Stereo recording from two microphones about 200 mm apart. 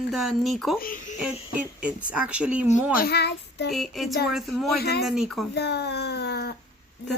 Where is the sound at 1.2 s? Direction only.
5° right (ahead or behind).